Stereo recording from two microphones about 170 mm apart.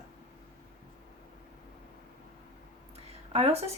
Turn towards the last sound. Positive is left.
turn(degrees=-35)  # may be behind; listen again after turning